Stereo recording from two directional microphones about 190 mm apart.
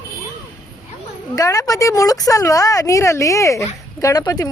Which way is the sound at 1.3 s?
20° left (ahead or behind).